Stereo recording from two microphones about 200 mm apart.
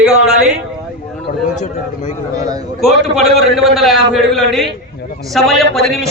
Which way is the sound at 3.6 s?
Centre (ahead or behind).